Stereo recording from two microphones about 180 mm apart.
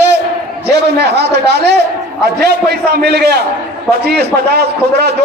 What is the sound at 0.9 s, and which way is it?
A man's voice, 70° right (ahead or behind).